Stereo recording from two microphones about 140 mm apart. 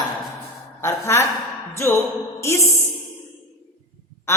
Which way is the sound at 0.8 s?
20° left (ahead or behind).